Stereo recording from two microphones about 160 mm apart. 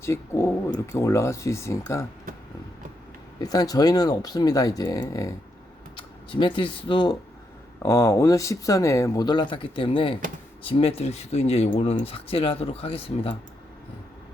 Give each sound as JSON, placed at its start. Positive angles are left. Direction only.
{"t": 0.0, "sound": "speech", "side_deg": 15}
{"t": 3.4, "sound": "speech", "side_deg": 25}
{"t": 6.3, "sound": "speech", "side_deg": 30}
{"t": 7.8, "sound": "speech", "side_deg": 15}